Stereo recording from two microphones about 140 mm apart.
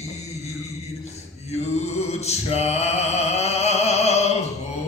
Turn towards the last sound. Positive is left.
turn(degrees=50)  # may be behind; listen again after turning